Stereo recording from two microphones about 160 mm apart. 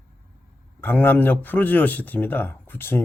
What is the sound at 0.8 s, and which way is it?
Speech, 10° left (ahead or behind).